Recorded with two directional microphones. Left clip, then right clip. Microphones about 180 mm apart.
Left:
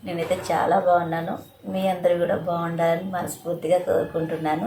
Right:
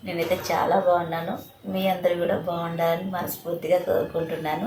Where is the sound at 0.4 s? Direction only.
Centre (ahead or behind).